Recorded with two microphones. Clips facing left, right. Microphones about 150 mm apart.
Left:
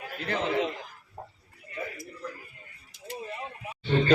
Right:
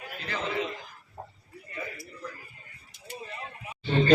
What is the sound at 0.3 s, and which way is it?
Speech, 55° left (ahead or behind).